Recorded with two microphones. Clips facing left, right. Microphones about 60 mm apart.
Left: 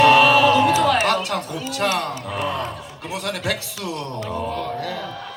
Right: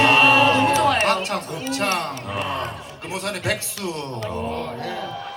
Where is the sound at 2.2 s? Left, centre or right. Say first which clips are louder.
Left 1 dB; right.